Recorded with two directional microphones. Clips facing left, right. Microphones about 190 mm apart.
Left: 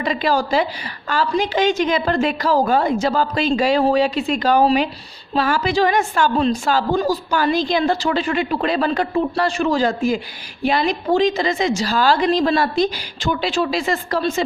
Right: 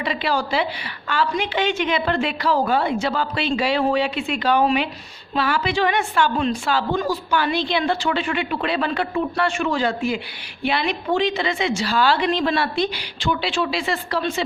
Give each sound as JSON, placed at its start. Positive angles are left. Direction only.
{"t": 0.0, "sound": "a woman's voice", "side_deg": 45}